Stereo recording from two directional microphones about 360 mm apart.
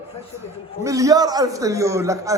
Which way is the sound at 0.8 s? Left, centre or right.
Centre.